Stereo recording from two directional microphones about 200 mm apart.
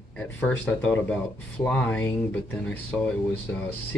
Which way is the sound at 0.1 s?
5° left (ahead or behind).